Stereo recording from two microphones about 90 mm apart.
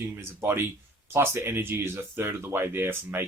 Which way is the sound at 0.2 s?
30° right (ahead or behind).